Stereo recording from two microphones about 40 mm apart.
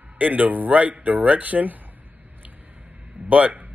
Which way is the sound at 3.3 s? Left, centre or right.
Right.